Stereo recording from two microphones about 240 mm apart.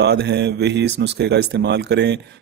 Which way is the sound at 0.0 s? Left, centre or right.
Right.